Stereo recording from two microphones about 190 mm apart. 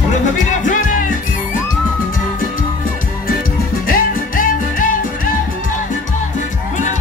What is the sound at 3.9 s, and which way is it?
Music, 45° left (ahead or behind).